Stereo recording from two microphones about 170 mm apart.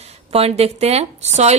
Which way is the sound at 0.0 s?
35° right (ahead or behind).